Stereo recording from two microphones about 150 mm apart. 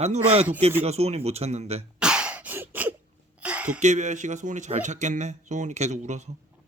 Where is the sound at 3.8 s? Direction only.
55° right (ahead or behind).